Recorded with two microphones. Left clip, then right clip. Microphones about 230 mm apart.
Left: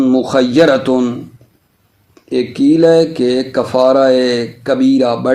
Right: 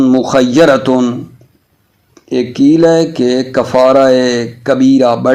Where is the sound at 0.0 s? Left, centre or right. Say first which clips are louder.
Right 2 dB; right.